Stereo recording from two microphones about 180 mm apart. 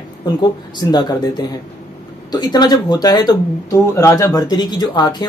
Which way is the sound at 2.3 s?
25° left (ahead or behind).